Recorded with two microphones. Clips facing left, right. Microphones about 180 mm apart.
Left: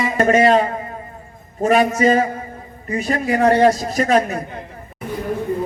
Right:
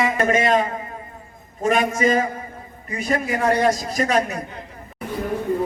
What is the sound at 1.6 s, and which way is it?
A man's voice, 40° left (ahead or behind).